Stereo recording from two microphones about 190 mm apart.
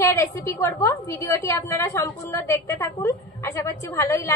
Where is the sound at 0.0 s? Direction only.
15° left (ahead or behind).